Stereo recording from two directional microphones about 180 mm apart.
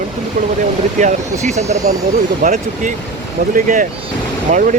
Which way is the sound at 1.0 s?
40° right (ahead or behind).